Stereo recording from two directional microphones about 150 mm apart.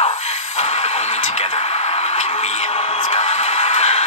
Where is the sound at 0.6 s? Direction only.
50° left (ahead or behind).